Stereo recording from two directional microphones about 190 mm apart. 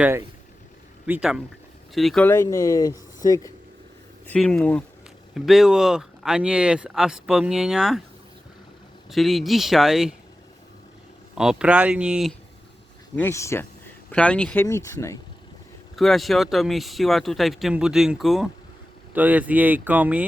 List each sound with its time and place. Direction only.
1.0 s speech: 5° right (ahead or behind)
2.2 s speech: 15° left (ahead or behind)
4.3 s speech: 5° left (ahead or behind)
9.0 s speech: centre (ahead or behind)
11.3 s speech: 5° right (ahead or behind)
13.1 s speech: 15° left (ahead or behind)
16.0 s speech: centre (ahead or behind)